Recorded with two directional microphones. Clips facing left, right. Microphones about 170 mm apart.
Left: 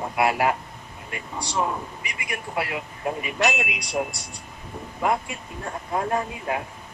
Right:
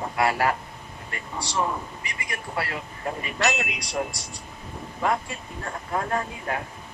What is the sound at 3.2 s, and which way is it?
Speech, 15° left (ahead or behind).